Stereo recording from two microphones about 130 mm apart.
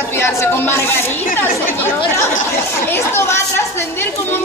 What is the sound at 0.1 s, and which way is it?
A woman's voice, 20° left (ahead or behind).